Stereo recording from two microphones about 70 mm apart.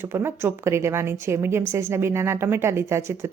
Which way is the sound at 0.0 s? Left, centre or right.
Right.